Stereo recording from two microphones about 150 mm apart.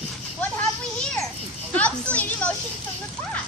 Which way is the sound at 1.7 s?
10° left (ahead or behind).